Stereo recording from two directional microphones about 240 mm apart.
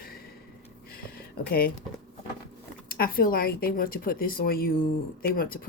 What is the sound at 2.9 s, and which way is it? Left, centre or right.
Speech, left.